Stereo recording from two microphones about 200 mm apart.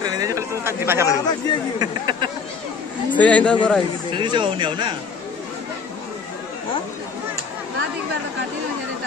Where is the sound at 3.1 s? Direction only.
5° left (ahead or behind).